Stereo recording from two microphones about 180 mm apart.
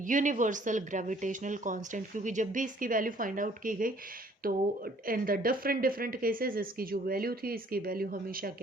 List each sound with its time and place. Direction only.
0.0 s a woman's voice: 45° right (ahead or behind)